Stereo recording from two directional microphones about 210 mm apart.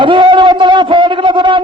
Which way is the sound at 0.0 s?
25° right (ahead or behind).